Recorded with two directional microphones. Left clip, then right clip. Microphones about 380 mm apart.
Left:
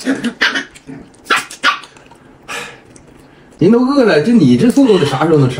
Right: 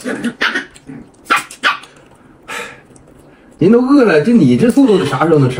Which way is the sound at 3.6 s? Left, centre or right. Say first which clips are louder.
Right 1 dB; centre.